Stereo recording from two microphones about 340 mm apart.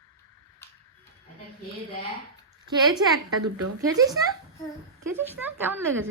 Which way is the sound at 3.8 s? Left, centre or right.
Centre.